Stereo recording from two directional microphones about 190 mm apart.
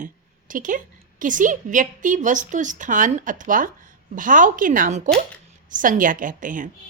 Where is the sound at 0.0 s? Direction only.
45° right (ahead or behind).